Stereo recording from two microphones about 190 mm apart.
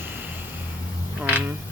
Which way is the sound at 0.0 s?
10° right (ahead or behind).